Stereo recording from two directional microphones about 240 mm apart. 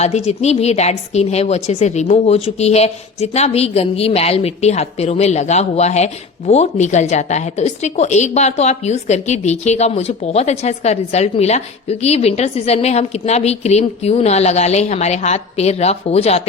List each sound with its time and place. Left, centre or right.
0.0 s a woman's voice: left